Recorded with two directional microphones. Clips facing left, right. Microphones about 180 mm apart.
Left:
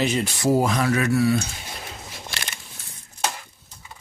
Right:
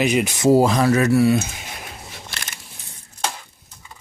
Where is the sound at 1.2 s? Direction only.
25° right (ahead or behind).